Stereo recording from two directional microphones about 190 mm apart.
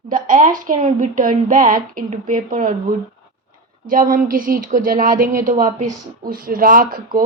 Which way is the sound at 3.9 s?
45° right (ahead or behind).